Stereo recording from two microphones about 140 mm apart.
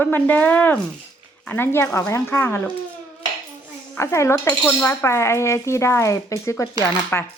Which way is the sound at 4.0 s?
20° left (ahead or behind).